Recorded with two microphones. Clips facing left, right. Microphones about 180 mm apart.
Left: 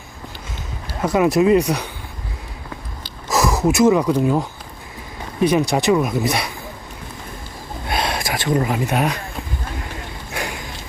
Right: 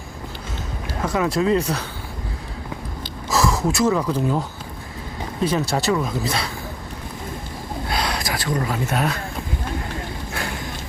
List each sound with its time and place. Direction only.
1.0 s speech: 20° left (ahead or behind)
3.2 s a sound: 20° left (ahead or behind)
5.4 s speech: 15° left (ahead or behind)
7.9 s speech: 25° left (ahead or behind)